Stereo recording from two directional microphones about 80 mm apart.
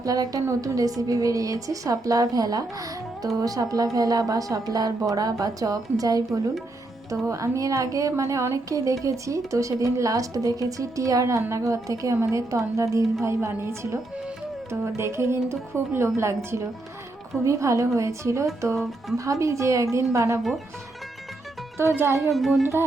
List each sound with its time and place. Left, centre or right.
0.0 s speech: right
21.8 s speech: right
22.3 s speech: centre
22.6 s speech: right